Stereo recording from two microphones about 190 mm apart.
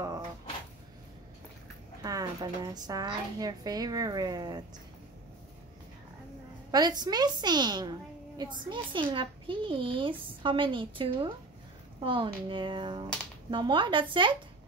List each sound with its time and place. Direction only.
2.0 s a woman's voice: 20° right (ahead or behind)
6.7 s a woman's voice: 20° right (ahead or behind)